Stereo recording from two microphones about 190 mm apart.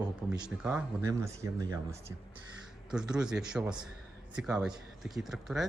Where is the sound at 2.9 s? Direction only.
5° right (ahead or behind).